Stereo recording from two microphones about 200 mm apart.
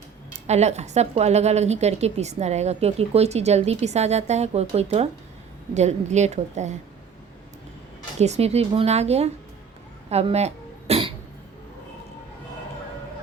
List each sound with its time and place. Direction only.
0.4 s a woman's voice: 35° right (ahead or behind)
8.2 s a woman's voice: 30° right (ahead or behind)
10.1 s cough: 30° right (ahead or behind)